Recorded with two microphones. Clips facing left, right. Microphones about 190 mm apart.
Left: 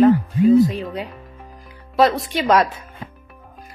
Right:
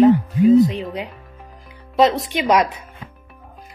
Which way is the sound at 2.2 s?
15° right (ahead or behind).